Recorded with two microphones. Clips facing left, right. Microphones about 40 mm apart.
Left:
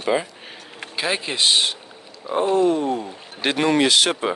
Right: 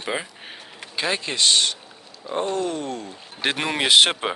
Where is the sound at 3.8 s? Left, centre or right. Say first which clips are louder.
Right 1 dB; right.